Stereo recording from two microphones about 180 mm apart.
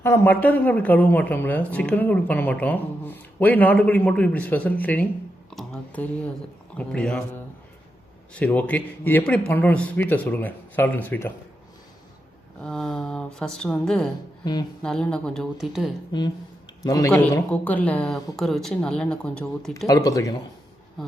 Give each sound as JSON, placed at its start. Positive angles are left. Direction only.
{"t": 0.0, "sound": "speech", "side_deg": 15}
{"t": 8.3, "sound": "speech", "side_deg": 10}
{"t": 12.6, "sound": "speech", "side_deg": 0}
{"t": 14.4, "sound": "speech", "side_deg": 20}
{"t": 14.8, "sound": "speech", "side_deg": 5}
{"t": 16.8, "sound": "speech", "side_deg": 20}
{"t": 19.9, "sound": "speech", "side_deg": 20}